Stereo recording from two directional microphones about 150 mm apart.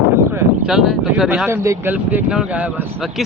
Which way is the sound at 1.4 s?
20° right (ahead or behind).